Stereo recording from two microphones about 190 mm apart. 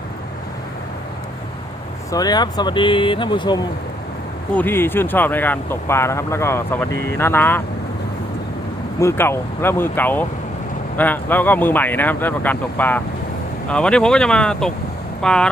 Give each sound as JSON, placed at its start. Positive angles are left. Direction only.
{"t": 2.1, "sound": "speech", "side_deg": 20}
{"t": 4.5, "sound": "speech", "side_deg": 10}
{"t": 9.0, "sound": "speech", "side_deg": 15}